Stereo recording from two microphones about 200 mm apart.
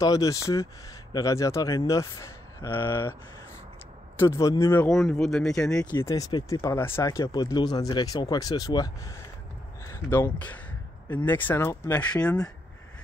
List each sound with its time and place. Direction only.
0.0 s speech: 15° left (ahead or behind)
4.2 s speech: 15° left (ahead or behind)
4.8 s speech: centre (ahead or behind)